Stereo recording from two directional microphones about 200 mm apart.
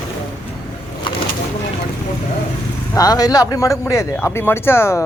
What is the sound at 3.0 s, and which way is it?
Speech, 20° left (ahead or behind).